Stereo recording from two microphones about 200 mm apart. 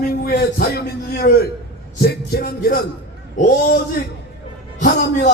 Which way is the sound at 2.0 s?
50° left (ahead or behind).